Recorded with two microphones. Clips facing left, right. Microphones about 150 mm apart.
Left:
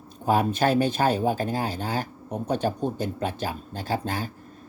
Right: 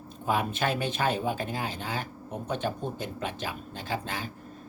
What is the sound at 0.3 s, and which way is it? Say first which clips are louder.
Speech: left 6 dB; 40° left (ahead or behind).